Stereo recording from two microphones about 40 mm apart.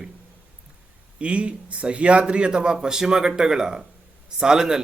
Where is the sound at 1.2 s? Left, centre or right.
Right.